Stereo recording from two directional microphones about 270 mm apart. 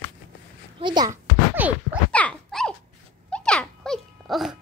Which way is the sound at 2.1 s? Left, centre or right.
Centre.